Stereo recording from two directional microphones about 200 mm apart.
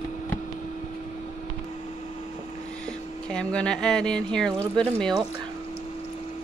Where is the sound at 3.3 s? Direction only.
5° left (ahead or behind).